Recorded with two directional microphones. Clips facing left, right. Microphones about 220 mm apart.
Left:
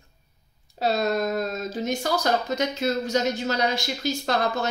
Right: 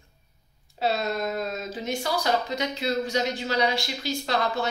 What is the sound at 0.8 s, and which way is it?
Speech, 40° left (ahead or behind).